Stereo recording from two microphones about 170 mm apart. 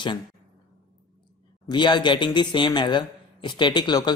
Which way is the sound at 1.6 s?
25° left (ahead or behind).